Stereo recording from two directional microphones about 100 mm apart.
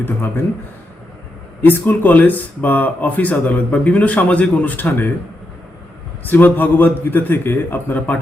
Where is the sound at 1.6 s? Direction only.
20° left (ahead or behind).